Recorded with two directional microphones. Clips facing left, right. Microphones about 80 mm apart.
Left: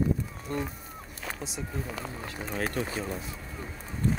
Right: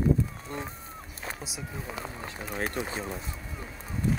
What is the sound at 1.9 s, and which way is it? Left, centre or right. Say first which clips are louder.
Speech: left 1 dB; centre.